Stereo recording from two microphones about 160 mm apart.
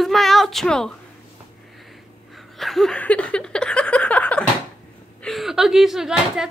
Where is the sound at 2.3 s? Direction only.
Centre (ahead or behind).